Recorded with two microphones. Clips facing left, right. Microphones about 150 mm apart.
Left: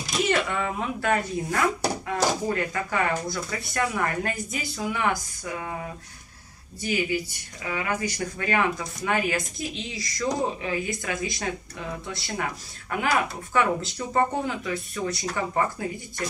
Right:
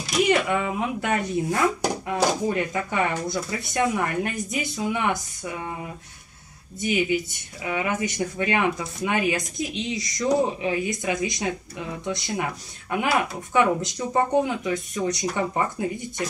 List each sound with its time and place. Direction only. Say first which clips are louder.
0.2 s speech: right 4 dB; 15° right (ahead or behind)
6.8 s speech: right 3 dB; 20° right (ahead or behind)